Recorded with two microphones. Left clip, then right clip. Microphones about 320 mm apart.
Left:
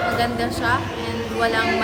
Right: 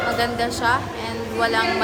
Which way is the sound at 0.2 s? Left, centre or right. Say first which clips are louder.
Even; centre.